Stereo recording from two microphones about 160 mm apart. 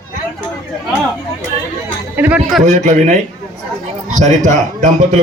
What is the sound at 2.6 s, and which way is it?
A man's voice, 45° right (ahead or behind).